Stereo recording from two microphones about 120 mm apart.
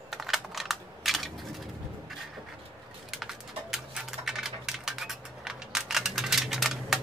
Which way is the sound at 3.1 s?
5° right (ahead or behind).